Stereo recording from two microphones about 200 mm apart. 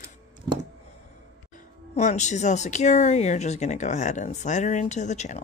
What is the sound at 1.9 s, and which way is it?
Speech, 35° left (ahead or behind).